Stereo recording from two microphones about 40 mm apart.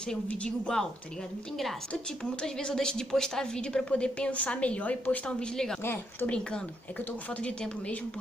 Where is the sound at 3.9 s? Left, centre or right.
Left.